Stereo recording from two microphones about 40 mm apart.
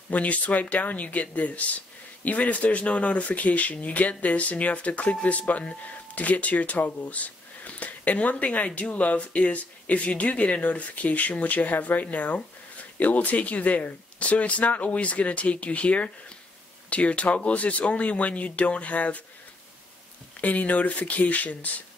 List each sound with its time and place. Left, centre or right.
0.1 s speech: left
6.1 s speech: left
20.3 s speech: left